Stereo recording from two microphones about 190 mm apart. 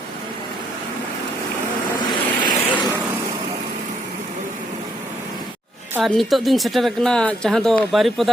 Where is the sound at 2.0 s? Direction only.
20° left (ahead or behind).